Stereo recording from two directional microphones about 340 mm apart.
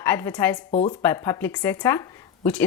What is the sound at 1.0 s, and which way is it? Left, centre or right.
Speech, centre.